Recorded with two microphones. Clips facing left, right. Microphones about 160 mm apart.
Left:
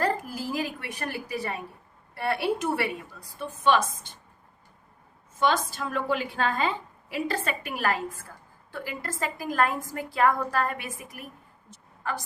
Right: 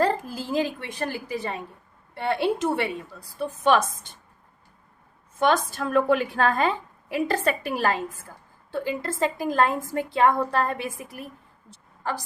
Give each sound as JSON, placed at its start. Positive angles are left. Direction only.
{"t": 0.0, "sound": "a woman's voice", "side_deg": -25}
{"t": 5.4, "sound": "a woman's voice", "side_deg": -55}
{"t": 11.7, "sound": "a sound", "side_deg": -30}